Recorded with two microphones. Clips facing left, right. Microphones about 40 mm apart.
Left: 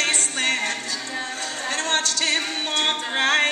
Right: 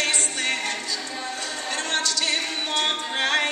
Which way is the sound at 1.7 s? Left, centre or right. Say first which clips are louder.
Left 2 dB; left.